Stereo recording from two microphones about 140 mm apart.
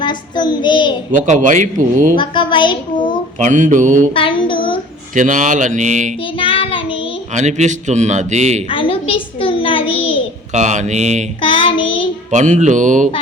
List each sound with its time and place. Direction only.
0.0 s child singing: 30° left (ahead or behind)
1.3 s a man's voice: 65° right (ahead or behind)
2.1 s a woman's voice: 35° left (ahead or behind)
3.3 s a man's voice: 65° right (ahead or behind)
4.1 s music: 40° left (ahead or behind)
5.1 s a man's voice: 65° right (ahead or behind)
6.4 s child singing: 40° left (ahead or behind)
7.3 s a man's voice: 55° right (ahead or behind)
8.7 s a sound: 40° left (ahead or behind)
10.5 s a man's voice: 60° right (ahead or behind)
11.3 s child singing: 40° left (ahead or behind)
12.3 s a man's voice: 60° right (ahead or behind)